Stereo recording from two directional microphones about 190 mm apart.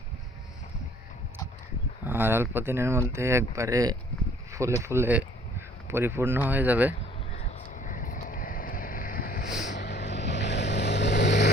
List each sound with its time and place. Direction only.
2.0 s speech: 10° right (ahead or behind)
7.3 s vehicle: 40° left (ahead or behind)
9.7 s vehicle: 65° left (ahead or behind)